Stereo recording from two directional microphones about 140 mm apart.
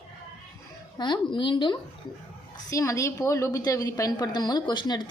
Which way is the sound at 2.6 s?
20° left (ahead or behind).